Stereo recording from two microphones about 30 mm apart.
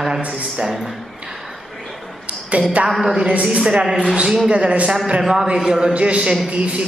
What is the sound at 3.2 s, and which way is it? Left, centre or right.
Speech, right.